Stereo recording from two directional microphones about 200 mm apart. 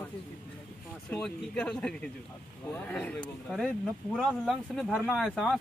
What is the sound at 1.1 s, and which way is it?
Speech, 5° left (ahead or behind).